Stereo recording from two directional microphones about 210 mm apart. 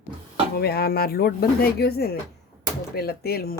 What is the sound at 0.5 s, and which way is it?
Speech, 50° left (ahead or behind).